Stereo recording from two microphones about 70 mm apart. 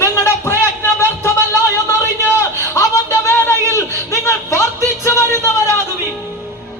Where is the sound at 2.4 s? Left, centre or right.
Left.